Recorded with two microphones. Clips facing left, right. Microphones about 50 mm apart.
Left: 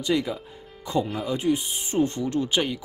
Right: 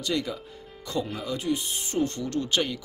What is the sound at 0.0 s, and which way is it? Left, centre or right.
Speech, centre.